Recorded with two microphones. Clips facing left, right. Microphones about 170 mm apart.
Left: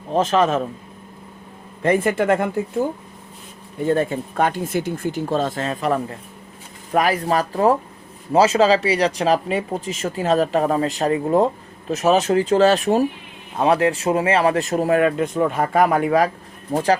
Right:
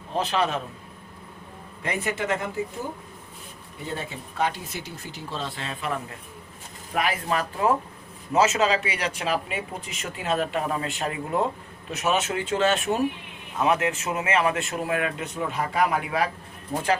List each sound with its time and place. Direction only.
0.1 s speech: 45° left (ahead or behind)
1.8 s speech: 50° left (ahead or behind)
3.8 s speech: 50° left (ahead or behind); by 17.0 s 35° left (ahead or behind)